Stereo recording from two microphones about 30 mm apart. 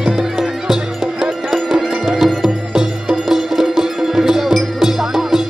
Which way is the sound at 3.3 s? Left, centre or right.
Centre.